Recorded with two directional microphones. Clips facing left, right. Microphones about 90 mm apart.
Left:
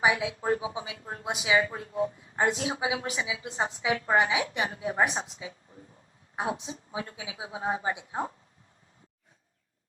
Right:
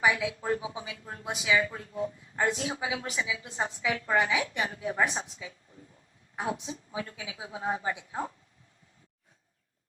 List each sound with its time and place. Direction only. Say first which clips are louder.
0.0 s a woman's voice: left 1 dB; 25° left (ahead or behind)